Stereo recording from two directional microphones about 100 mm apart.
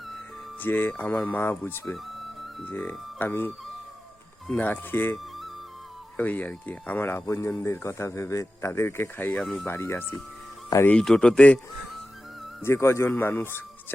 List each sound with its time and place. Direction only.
0.6 s speech: 20° left (ahead or behind)
4.5 s speech: 20° left (ahead or behind)
6.1 s speech: 15° left (ahead or behind)
9.4 s speech: 10° left (ahead or behind)
9.6 s speech: 25° left (ahead or behind)
10.8 s speech: 10° left (ahead or behind)
12.6 s speech: 25° left (ahead or behind)